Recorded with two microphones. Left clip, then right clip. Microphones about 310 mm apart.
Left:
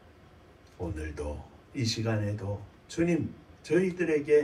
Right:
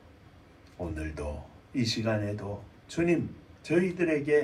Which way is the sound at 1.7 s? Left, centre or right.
Right.